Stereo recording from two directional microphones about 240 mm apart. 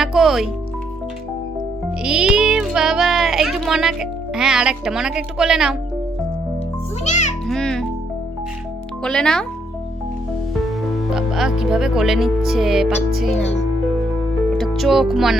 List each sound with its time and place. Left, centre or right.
0.0 s music: centre
2.0 s speech: centre
7.0 s a child's voice: left
7.4 s a child's voice: centre
9.0 s music: centre
10.7 s speech: centre
12.5 s music: centre
14.6 s speech: centre